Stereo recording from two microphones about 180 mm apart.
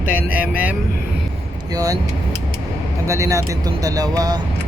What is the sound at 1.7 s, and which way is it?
Speech, 20° right (ahead or behind).